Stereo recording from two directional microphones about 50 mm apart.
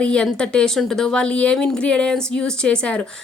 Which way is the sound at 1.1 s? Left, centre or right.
Left.